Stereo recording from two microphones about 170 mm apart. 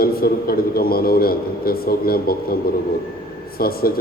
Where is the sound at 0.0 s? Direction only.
60° left (ahead or behind).